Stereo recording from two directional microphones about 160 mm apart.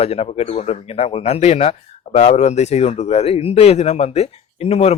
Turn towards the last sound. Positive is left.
turn(degrees=40)  # may be behind; listen again after turning